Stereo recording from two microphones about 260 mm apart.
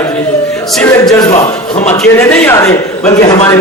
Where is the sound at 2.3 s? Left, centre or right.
Centre.